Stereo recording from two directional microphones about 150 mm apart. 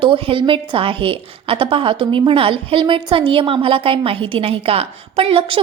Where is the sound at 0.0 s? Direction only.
35° right (ahead or behind).